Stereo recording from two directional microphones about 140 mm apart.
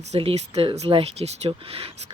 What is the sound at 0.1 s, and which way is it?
Speech, 45° right (ahead or behind).